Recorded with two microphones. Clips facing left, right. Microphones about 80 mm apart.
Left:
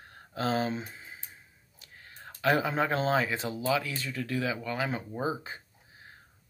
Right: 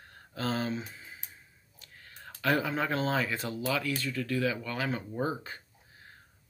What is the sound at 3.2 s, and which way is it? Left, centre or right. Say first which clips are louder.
Speech: left 2 dB; centre.